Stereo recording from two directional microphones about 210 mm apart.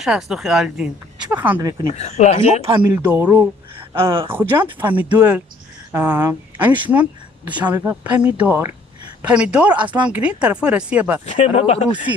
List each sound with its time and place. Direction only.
0.0 s a woman's voice: centre (ahead or behind)
1.9 s speech: 30° left (ahead or behind)
2.9 s a woman's voice: 10° right (ahead or behind)
11.3 s speech: 30° left (ahead or behind)